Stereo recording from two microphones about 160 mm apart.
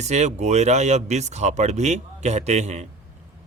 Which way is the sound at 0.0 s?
45° right (ahead or behind).